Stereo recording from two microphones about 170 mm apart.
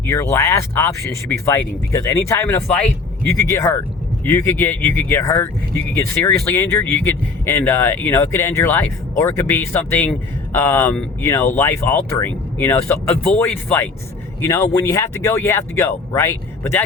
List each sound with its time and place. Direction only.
0.0 s speech: 15° left (ahead or behind)